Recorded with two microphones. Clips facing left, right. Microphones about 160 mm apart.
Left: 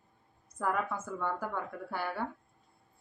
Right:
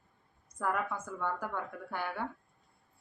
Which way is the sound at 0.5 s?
5° left (ahead or behind).